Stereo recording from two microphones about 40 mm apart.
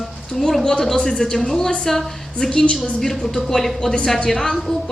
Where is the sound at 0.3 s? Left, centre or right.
Centre.